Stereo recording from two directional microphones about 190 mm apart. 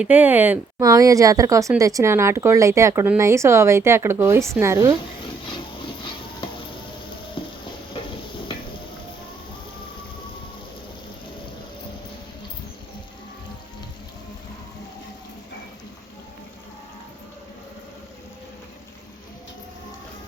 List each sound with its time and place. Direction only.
0.0 s speech: 10° right (ahead or behind)
7.4 s stir: 25° left (ahead or behind)